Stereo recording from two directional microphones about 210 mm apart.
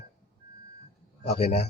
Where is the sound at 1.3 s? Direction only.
30° left (ahead or behind).